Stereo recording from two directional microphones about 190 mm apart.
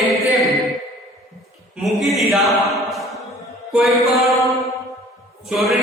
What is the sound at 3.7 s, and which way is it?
Music, centre (ahead or behind).